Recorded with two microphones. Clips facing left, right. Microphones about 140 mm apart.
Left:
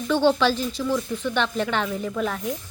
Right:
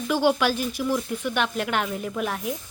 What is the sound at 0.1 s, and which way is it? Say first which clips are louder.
A woman's voice: left 2 dB; 10° right (ahead or behind).